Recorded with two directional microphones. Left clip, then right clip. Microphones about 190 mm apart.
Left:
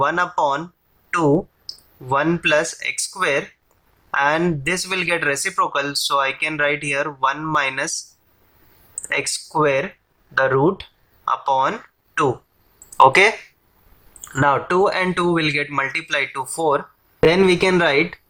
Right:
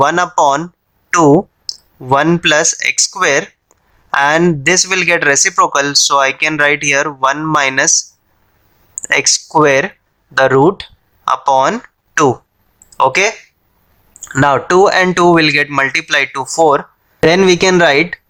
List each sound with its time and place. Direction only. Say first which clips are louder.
0.0 s speech: right 8 dB; 35° right (ahead or behind)
9.0 s speech: right 11 dB; 40° right (ahead or behind)
13.0 s speech: even; 15° right (ahead or behind)
14.3 s speech: right 7 dB; 35° right (ahead or behind)